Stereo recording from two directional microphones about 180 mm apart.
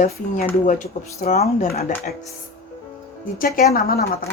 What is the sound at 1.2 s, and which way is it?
Speech, 40° left (ahead or behind).